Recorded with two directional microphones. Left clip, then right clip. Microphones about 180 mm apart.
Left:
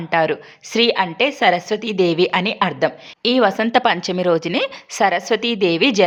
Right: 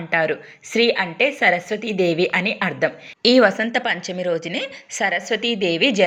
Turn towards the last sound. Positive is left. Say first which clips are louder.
# left 2 dB
turn(degrees=35)  # may be behind; listen again after turning